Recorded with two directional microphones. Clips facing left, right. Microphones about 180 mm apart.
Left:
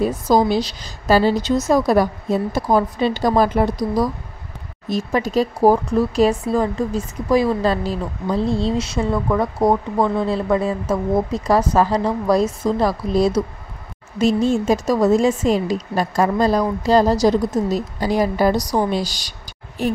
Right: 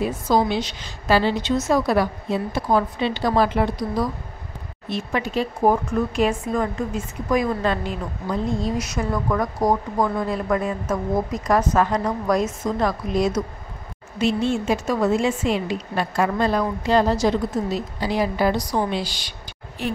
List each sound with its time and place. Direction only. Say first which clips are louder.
0.0 s speech: left 4 dB; 40° left (ahead or behind)